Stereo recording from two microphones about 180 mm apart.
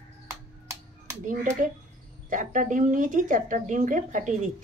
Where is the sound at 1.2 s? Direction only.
45° right (ahead or behind).